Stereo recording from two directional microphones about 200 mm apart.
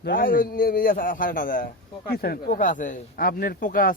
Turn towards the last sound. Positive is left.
turn(degrees=45)  # may be behind; listen again after turning